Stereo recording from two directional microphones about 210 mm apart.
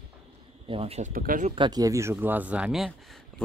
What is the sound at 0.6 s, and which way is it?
Speech, 25° right (ahead or behind).